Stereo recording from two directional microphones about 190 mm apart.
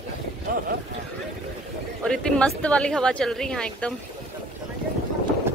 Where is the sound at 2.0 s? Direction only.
5° left (ahead or behind).